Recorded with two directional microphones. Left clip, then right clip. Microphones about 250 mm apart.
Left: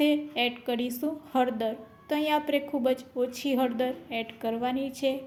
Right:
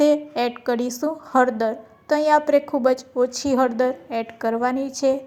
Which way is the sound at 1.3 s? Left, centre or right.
Centre.